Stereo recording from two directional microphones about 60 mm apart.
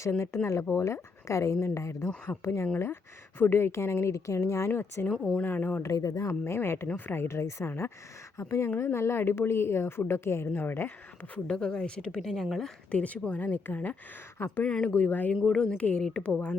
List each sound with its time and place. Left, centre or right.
0.7 s a woman's voice: left
4.7 s speech: left
5.9 s speech: left
6.4 s a woman's voice: left
6.8 s a woman's voice: left
11.4 s a woman's voice: centre
12.2 s speech: centre
12.9 s speech: left
14.3 s speech: left
14.6 s speech: centre
15.4 s a woman's voice: centre